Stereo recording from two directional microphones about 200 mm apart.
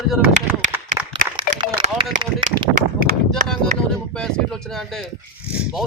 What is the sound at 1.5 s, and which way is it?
Speech, 35° right (ahead or behind).